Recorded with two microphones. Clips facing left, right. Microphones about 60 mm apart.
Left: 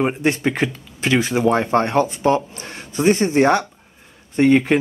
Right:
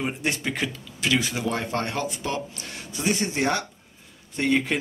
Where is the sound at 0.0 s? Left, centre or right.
Left.